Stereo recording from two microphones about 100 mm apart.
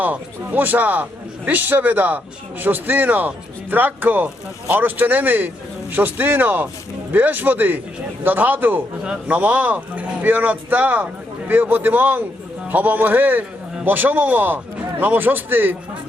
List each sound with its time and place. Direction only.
0.0 s speech: 15° right (ahead or behind)